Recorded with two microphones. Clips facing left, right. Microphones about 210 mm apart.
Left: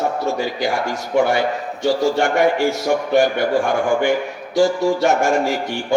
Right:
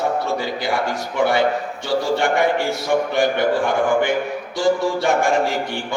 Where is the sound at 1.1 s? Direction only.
45° left (ahead or behind).